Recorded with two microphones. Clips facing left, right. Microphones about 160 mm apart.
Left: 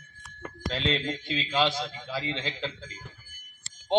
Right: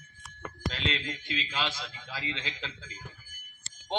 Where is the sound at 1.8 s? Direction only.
35° left (ahead or behind).